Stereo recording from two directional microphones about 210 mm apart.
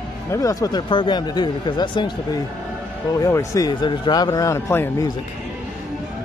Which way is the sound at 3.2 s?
15° left (ahead or behind).